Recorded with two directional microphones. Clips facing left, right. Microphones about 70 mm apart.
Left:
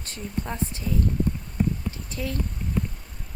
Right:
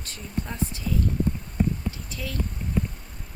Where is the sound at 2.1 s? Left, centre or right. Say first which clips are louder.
Left 4 dB; left.